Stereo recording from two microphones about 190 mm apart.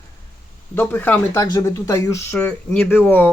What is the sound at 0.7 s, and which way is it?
Speech, 10° left (ahead or behind).